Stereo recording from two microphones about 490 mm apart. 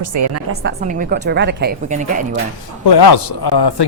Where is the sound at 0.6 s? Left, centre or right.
Centre.